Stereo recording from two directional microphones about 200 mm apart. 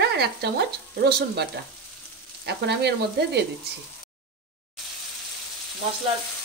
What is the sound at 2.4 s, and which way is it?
Frying, 55° right (ahead or behind).